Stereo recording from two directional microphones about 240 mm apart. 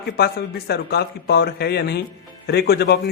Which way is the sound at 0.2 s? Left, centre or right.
Left.